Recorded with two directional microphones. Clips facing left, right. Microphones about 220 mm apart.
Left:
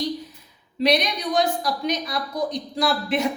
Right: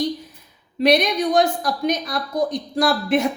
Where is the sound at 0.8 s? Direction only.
50° right (ahead or behind).